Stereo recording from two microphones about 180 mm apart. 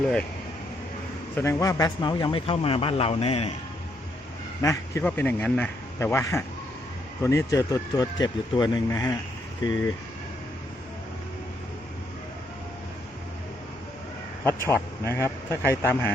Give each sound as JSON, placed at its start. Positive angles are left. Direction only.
{"t": 1.4, "sound": "a man's voice", "side_deg": 15}
{"t": 4.6, "sound": "a man's voice", "side_deg": 15}
{"t": 14.4, "sound": "speech", "side_deg": 15}